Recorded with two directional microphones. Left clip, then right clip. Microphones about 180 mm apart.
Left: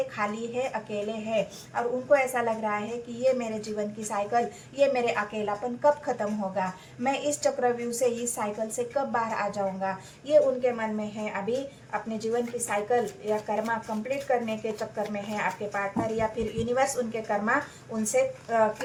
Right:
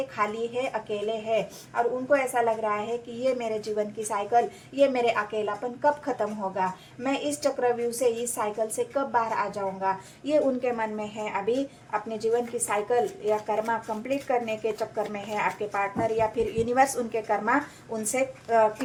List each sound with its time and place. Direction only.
0.2 s a woman's voice: 35° right (ahead or behind)
9.8 s a woman's voice: 45° right (ahead or behind)